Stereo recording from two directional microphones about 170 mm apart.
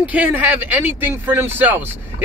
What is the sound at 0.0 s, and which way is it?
Speech, 10° right (ahead or behind).